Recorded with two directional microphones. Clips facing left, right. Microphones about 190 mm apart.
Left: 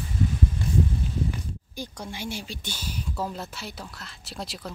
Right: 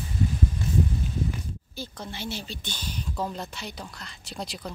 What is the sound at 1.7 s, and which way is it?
Speech, 10° left (ahead or behind).